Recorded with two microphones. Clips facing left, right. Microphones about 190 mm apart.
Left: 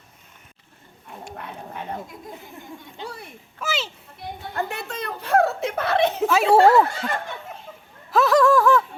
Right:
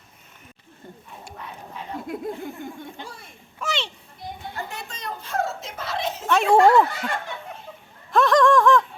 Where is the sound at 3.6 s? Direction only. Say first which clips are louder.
Left 1 dB; 5° left (ahead or behind).